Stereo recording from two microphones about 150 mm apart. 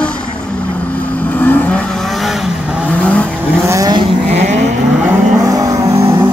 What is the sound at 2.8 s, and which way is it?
Vehicle, 10° left (ahead or behind).